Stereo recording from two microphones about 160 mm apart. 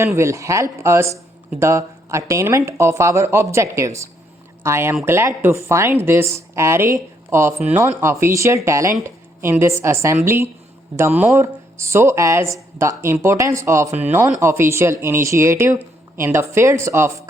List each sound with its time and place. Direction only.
0.0 s a woman's voice: 15° right (ahead or behind)